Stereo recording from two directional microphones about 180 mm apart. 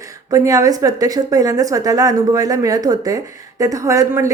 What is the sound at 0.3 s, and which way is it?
A woman's voice, 20° right (ahead or behind).